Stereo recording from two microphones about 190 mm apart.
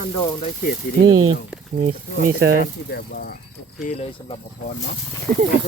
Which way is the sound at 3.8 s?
35° left (ahead or behind).